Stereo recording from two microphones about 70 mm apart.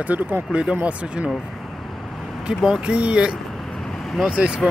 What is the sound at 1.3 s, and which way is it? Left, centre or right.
Vehicle, centre.